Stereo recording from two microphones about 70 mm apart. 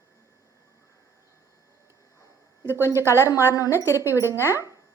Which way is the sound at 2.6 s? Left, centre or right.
Right.